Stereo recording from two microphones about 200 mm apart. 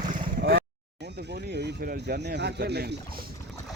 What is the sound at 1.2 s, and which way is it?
Speech, 55° right (ahead or behind).